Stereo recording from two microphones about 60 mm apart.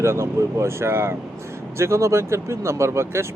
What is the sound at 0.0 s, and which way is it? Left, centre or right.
Speech, right.